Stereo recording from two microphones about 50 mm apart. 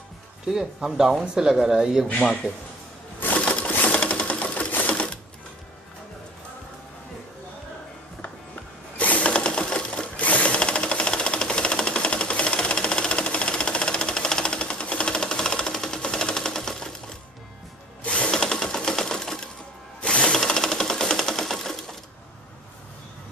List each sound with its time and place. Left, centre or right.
0.5 s speech: centre
2.4 s speech: right
3.3 s crushing: left
3.8 s sewing machine: left
8.9 s sewing machine: left; by 16.9 s centre
18.0 s ratchet: left
18.3 s sewing machine: centre
20.0 s ratchet: left
20.3 s sewing machine: centre